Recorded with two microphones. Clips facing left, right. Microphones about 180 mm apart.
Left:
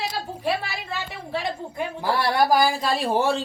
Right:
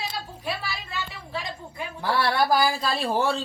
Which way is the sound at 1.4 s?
60° left (ahead or behind).